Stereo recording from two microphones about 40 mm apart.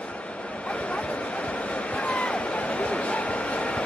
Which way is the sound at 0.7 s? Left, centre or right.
Left.